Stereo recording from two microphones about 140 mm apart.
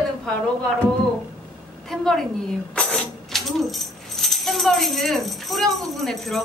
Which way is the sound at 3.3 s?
Centre (ahead or behind).